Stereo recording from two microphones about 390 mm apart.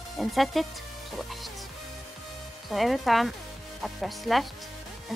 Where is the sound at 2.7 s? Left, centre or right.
Centre.